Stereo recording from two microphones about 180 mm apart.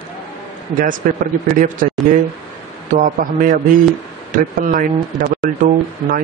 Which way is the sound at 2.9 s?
45° right (ahead or behind).